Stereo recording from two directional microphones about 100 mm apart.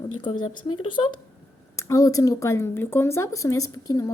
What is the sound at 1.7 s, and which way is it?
Speech, 35° left (ahead or behind).